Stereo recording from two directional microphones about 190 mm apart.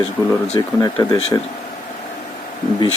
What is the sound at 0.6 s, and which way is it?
Speech, 20° left (ahead or behind).